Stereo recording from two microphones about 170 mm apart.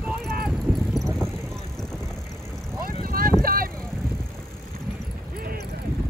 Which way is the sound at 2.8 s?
60° right (ahead or behind).